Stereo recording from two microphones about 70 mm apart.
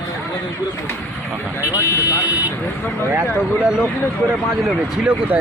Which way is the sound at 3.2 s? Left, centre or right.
Centre.